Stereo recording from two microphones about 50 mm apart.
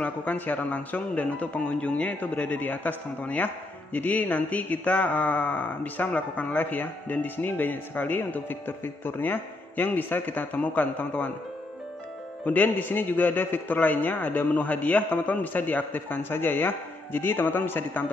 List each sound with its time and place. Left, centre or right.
0.0 s speech: left
12.4 s speech: left